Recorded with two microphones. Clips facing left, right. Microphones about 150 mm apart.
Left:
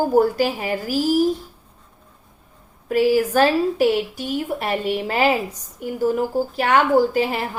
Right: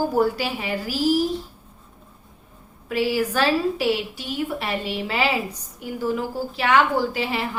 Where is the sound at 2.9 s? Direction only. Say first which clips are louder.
Left 5 dB; 45° left (ahead or behind).